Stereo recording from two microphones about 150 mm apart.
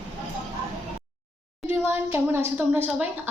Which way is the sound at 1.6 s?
15° right (ahead or behind).